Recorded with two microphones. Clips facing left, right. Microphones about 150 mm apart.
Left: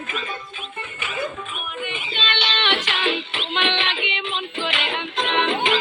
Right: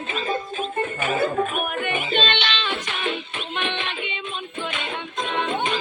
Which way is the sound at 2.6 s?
90° left.